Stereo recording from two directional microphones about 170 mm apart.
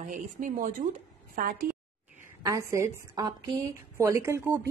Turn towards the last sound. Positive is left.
turn(degrees=-15)  # may be behind; listen again after turning